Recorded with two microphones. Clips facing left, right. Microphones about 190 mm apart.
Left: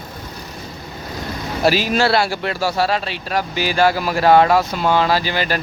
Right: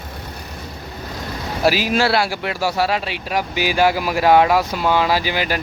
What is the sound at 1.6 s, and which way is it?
Speech, 5° right (ahead or behind).